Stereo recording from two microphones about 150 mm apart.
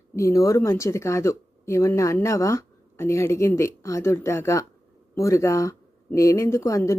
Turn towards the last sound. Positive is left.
turn(degrees=20)  # may be behind; listen again after turning